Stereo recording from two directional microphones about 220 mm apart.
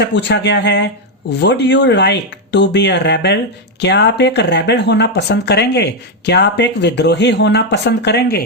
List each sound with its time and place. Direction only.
0.0 s speech: 50° left (ahead or behind)